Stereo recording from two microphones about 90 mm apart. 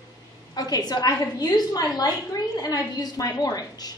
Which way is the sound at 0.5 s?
45° left (ahead or behind).